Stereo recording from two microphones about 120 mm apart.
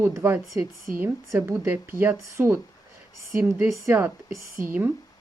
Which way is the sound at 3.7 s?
20° right (ahead or behind).